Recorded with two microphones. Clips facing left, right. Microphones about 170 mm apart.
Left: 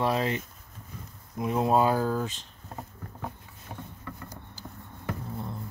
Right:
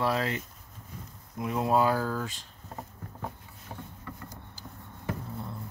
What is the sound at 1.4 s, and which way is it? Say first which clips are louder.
Speech: left 2 dB; 25° left (ahead or behind).